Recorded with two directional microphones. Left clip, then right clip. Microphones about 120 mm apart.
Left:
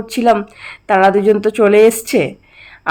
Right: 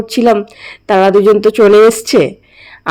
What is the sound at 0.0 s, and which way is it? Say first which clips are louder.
A woman's voice: right 3 dB; 25° right (ahead or behind).